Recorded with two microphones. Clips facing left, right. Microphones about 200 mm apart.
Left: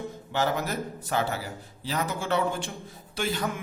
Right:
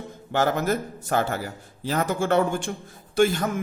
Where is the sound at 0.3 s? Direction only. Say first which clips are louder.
Right 5 dB; 50° right (ahead or behind).